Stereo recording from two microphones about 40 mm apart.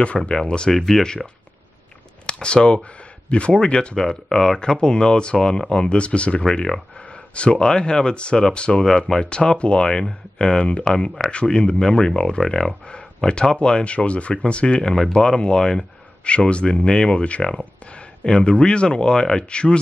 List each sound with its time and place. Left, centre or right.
0.3 s speech: left
0.7 s speech: centre
1.0 s speech: centre
4.0 s speech: centre
6.4 s speech: centre
12.4 s speech: centre
12.8 s speech: left
16.3 s speech: left